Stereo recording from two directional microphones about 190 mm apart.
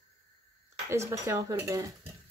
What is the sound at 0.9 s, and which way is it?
Speech, 15° right (ahead or behind).